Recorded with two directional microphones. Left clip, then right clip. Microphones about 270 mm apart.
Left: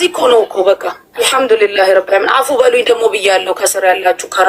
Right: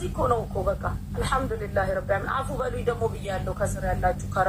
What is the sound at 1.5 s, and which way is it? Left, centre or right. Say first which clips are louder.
A woman's voice: left 18 dB; left.